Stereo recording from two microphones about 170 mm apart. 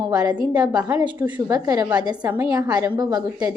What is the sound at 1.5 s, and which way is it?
Speech, 20° right (ahead or behind).